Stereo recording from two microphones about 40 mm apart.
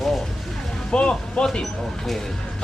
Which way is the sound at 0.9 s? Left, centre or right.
Left.